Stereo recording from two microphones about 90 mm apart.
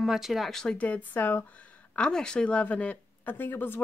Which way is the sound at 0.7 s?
15° left (ahead or behind).